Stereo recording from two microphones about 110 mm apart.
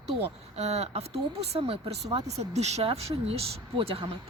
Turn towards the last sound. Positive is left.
turn(degrees=-55)  # may be behind; listen again after turning